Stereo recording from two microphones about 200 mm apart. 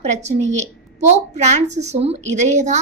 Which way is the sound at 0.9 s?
35° right (ahead or behind).